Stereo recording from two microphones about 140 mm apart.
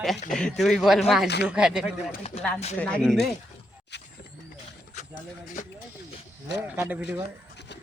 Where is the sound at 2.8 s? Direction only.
5° left (ahead or behind).